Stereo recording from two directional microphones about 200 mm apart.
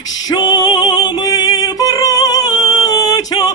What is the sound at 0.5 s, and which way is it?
Music, 20° left (ahead or behind).